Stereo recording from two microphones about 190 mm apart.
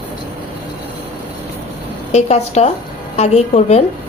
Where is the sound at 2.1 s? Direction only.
35° left (ahead or behind).